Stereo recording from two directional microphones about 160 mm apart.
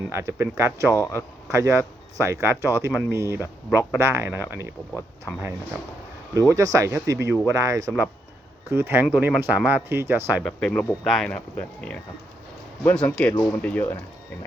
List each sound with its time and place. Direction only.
0.1 s speech: 15° right (ahead or behind)
0.9 s speech: 20° left (ahead or behind)
1.5 s speech: 15° right (ahead or behind)
6.5 s speech: 20° right (ahead or behind)
10.4 s speech: 5° left (ahead or behind)